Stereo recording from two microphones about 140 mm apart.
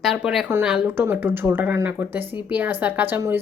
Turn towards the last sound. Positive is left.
turn(degrees=-15)  # may be behind; listen again after turning